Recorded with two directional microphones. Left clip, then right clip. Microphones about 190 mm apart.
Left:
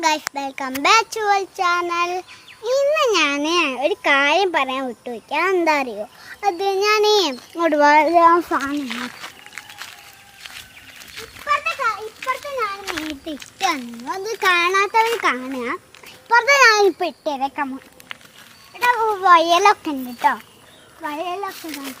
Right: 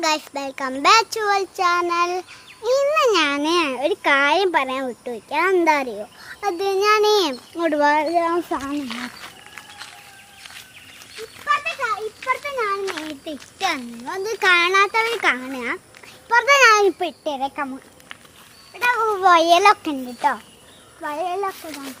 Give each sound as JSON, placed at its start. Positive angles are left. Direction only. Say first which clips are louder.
{"t": 0.0, "sound": "a child's voice", "louder": "left 2 dB", "side_deg": -10}
{"t": 7.5, "sound": "a child's voice", "louder": "left 5 dB", "side_deg": 10}
{"t": 8.0, "sound": "a child's voice", "louder": "left 7 dB", "side_deg": 25}
{"t": 8.9, "sound": "speech", "louder": "left 2 dB", "side_deg": 55}
{"t": 11.2, "sound": "a sound", "louder": "even", "side_deg": 65}
{"t": 12.5, "sound": "a child's voice", "louder": "right 1 dB", "side_deg": -10}
{"t": 12.8, "sound": "speech", "louder": "even", "side_deg": 65}
{"t": 13.2, "sound": "a child's voice", "louder": "left 2 dB", "side_deg": 0}
{"t": 18.8, "sound": "a child's voice", "louder": "left 1 dB", "side_deg": -25}
{"t": 21.0, "sound": "a child's voice", "louder": "right 2 dB", "side_deg": 0}